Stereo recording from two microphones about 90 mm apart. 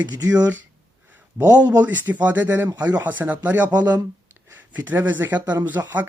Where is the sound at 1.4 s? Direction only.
40° right (ahead or behind).